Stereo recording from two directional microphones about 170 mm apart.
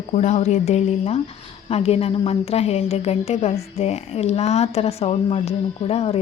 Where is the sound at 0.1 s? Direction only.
40° left (ahead or behind).